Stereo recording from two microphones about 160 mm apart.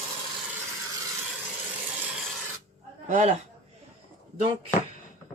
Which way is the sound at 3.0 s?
45° right (ahead or behind).